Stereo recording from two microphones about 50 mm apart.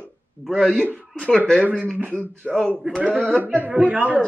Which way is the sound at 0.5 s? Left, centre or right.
Centre.